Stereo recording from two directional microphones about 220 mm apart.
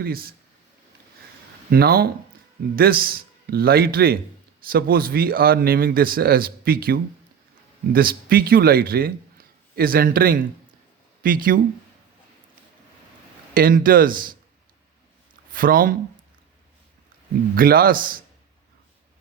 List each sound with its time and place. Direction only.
0.0 s speech: 45° right (ahead or behind)
1.7 s speech: 45° right (ahead or behind)
13.5 s speech: 40° right (ahead or behind)
15.5 s speech: 40° right (ahead or behind)
17.5 s speech: 40° right (ahead or behind)